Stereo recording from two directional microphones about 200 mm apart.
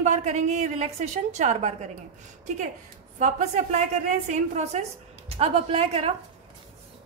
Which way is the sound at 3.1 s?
35° right (ahead or behind).